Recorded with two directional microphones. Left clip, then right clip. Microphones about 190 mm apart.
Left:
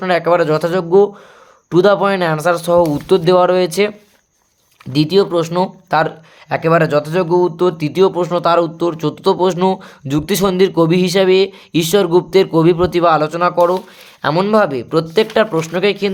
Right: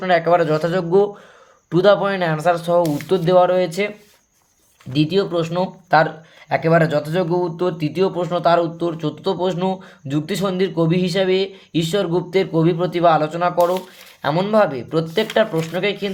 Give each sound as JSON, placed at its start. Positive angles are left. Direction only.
{"t": 0.0, "sound": "speech", "side_deg": 30}